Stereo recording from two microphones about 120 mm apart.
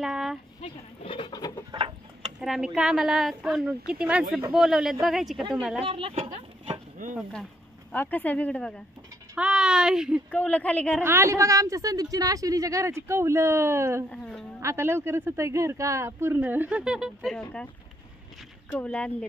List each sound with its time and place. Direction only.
0.0 s speech: 5° right (ahead or behind)
0.6 s speech: 50° left (ahead or behind)
1.7 s a sound: 40° right (ahead or behind)
2.4 s a woman's voice: 5° right (ahead or behind)
5.9 s speech: 45° right (ahead or behind)
7.9 s speech: 15° left (ahead or behind)
9.4 s speech: 5° right (ahead or behind)
10.3 s speech: 10° left (ahead or behind)
11.0 s a woman's voice: 20° right (ahead or behind)
14.1 s a sound: 5° left (ahead or behind)
14.6 s a woman's voice: 20° right (ahead or behind); by 17.4 s centre (ahead or behind)
17.4 s speech: 10° left (ahead or behind)
18.7 s speech: 10° left (ahead or behind)